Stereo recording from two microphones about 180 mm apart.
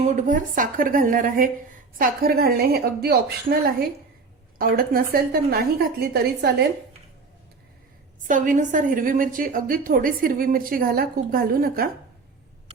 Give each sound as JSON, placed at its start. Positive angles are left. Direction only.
{"t": 0.0, "sound": "a woman's voice", "side_deg": -40}
{"t": 8.2, "sound": "a woman's voice", "side_deg": -45}